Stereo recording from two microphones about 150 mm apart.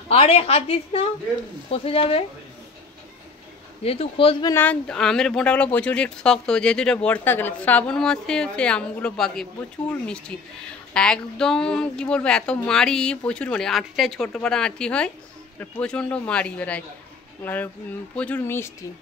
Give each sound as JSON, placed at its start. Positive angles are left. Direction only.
{"t": 0.1, "sound": "a woman's voice", "side_deg": 40}
{"t": 3.8, "sound": "a woman's voice", "side_deg": 40}
{"t": 4.5, "sound": "speech", "side_deg": 10}